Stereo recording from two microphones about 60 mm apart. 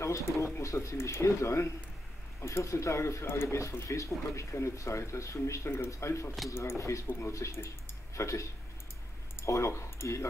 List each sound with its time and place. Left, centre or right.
0.0 s speech: left
7.1 s speech: left